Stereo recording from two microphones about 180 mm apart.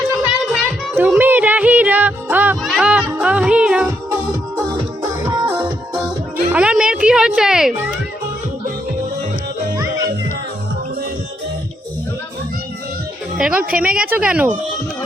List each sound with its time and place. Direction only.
0.3 s music: 5° right (ahead or behind)
3.8 s music: 20° right (ahead or behind)
6.5 s music: 5° right (ahead or behind)
13.3 s speech: 5° right (ahead or behind)